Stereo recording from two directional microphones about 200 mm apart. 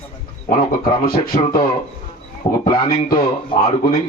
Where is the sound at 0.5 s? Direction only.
45° left (ahead or behind).